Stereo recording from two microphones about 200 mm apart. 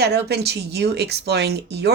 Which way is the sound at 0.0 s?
55° right (ahead or behind).